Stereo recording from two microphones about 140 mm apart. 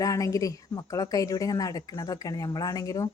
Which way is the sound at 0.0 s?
25° left (ahead or behind).